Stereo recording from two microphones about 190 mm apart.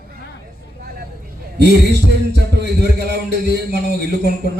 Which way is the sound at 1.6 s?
60° right (ahead or behind).